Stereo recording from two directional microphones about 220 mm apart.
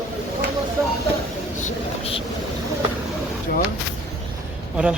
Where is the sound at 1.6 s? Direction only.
25° left (ahead or behind).